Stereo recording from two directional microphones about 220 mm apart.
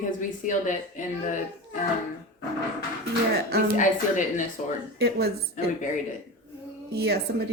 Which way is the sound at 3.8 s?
35° left (ahead or behind).